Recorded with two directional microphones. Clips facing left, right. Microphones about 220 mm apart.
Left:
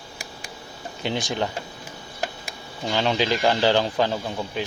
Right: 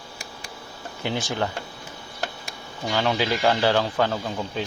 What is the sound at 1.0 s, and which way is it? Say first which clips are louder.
Speech: left 1 dB; 15° left (ahead or behind).